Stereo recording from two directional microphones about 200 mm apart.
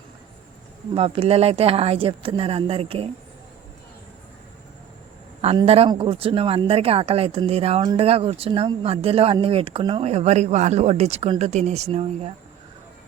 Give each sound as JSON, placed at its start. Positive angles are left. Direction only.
{"t": 0.9, "sound": "speech", "side_deg": -30}
{"t": 5.4, "sound": "speech", "side_deg": -30}